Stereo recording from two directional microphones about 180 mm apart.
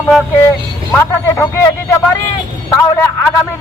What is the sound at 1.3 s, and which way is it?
Speech, 15° left (ahead or behind).